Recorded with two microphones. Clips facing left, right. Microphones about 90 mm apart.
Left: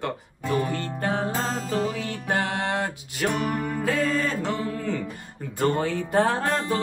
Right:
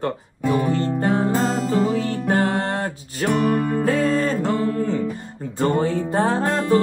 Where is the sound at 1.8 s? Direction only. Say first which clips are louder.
Right 7 dB; 35° right (ahead or behind).